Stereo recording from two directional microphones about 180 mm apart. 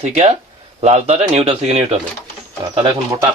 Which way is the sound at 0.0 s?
40° right (ahead or behind).